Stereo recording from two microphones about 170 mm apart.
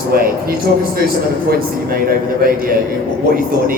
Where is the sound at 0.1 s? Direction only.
60° right (ahead or behind).